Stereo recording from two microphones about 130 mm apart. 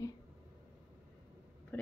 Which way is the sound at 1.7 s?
15° left (ahead or behind).